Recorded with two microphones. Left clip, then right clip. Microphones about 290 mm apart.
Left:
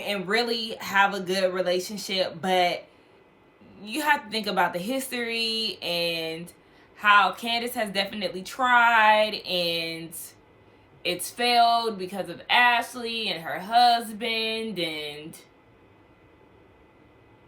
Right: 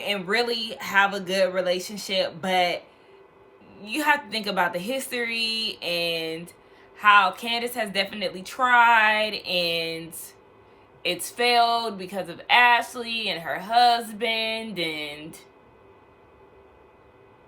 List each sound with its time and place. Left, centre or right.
0.0 s speech: centre